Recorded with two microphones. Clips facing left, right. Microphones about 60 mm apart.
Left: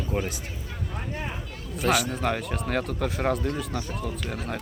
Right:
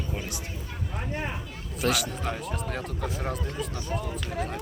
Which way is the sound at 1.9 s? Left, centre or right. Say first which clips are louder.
Left 4 dB; left.